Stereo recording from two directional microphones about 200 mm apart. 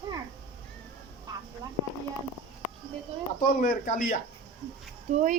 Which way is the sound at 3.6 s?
40° left (ahead or behind).